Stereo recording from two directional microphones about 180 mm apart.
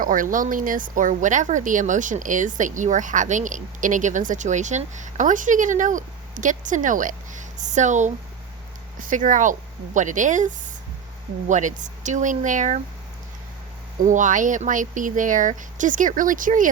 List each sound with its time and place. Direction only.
0.0 s speech: 50° right (ahead or behind)
14.1 s speech: 45° right (ahead or behind)